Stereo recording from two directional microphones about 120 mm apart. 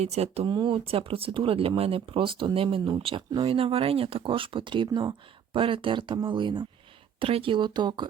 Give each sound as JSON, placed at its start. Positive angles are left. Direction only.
{"t": 0.0, "sound": "speech", "side_deg": -60}
{"t": 0.4, "sound": "speech", "side_deg": -40}